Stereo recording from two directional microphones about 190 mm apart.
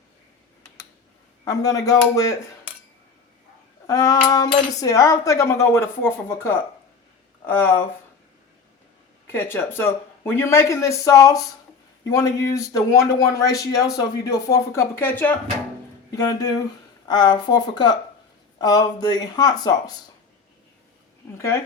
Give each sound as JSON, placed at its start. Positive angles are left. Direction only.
{"t": 1.5, "sound": "cutlery", "side_deg": 20}
{"t": 3.8, "sound": "speech", "side_deg": 20}
{"t": 4.3, "sound": "cutlery", "side_deg": 20}
{"t": 9.2, "sound": "cutlery", "side_deg": 10}
{"t": 16.1, "sound": "speech", "side_deg": 20}
{"t": 21.3, "sound": "cutlery", "side_deg": 15}